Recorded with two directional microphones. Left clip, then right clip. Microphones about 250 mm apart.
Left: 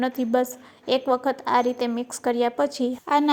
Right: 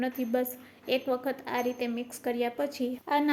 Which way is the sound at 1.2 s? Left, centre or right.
Centre.